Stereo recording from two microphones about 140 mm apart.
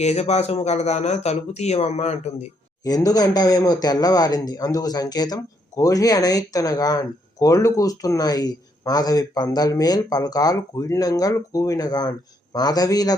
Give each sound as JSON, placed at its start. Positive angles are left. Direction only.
{"t": 0.0, "sound": "speech", "side_deg": 50}
{"t": 2.8, "sound": "speech", "side_deg": 25}